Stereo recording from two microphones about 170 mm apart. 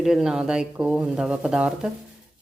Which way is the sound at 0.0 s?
5° right (ahead or behind).